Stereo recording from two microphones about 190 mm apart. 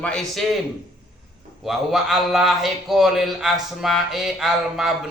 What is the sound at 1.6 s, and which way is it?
A man's voice, centre (ahead or behind).